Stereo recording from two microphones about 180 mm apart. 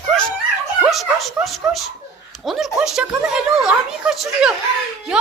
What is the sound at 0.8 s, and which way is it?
A man's voice, centre (ahead or behind).